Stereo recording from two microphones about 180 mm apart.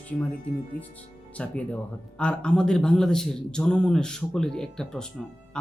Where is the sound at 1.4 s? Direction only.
5° left (ahead or behind).